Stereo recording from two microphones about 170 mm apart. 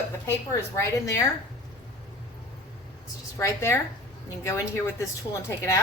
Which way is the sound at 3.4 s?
15° left (ahead or behind).